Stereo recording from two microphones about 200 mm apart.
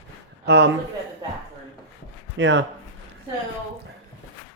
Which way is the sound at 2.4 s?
65° right (ahead or behind).